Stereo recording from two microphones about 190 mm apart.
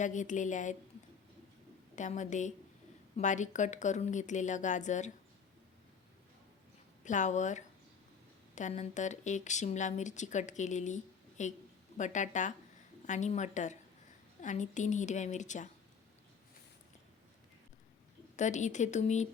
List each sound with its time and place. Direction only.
0.0 s speech: 40° left (ahead or behind)
2.0 s speech: 40° left (ahead or behind)
7.0 s speech: 40° left (ahead or behind)
18.3 s speech: 40° left (ahead or behind)